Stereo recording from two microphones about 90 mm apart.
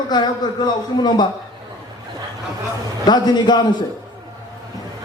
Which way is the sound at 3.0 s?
50° left (ahead or behind).